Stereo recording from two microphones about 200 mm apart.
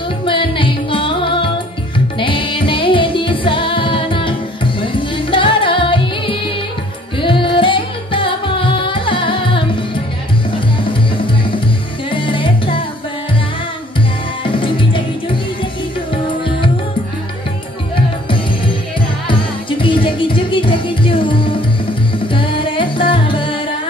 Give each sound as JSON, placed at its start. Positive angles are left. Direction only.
{"t": 0.2, "sound": "music", "side_deg": 25}
{"t": 12.1, "sound": "music", "side_deg": 25}
{"t": 14.4, "sound": "music", "side_deg": 25}
{"t": 19.8, "sound": "music", "side_deg": 25}